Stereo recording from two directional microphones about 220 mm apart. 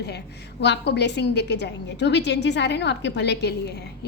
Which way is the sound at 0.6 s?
50° left (ahead or behind).